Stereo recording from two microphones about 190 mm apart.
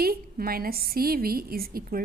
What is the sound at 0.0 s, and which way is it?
A woman's voice, 50° right (ahead or behind).